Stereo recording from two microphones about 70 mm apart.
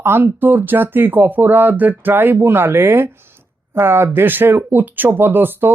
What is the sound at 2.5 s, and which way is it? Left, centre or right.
Speech, right.